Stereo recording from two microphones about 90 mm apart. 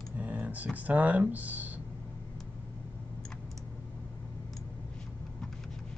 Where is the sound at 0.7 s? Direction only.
15° right (ahead or behind).